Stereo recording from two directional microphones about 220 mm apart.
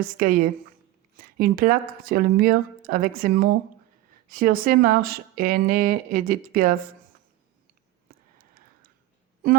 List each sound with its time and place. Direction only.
0.0 s speech: 40° right (ahead or behind)
8.4 s whispering: 40° right (ahead or behind)